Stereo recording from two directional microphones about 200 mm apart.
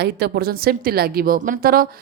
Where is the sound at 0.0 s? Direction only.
55° right (ahead or behind).